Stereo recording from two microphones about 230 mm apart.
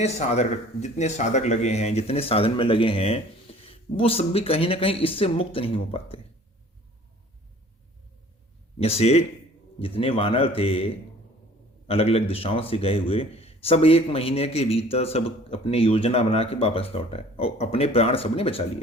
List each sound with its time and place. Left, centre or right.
0.0 s speech: left
8.8 s speech: left